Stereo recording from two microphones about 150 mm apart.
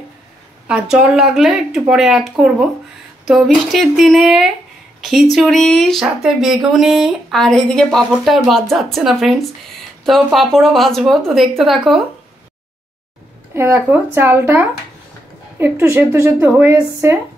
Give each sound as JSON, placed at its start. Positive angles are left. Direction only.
{"t": 0.7, "sound": "speech", "side_deg": -5}
{"t": 13.6, "sound": "speech", "side_deg": -15}